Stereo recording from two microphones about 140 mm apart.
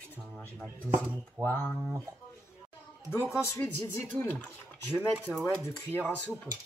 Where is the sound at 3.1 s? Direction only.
20° left (ahead or behind).